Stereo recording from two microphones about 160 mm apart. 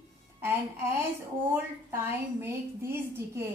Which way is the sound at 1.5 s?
15° right (ahead or behind).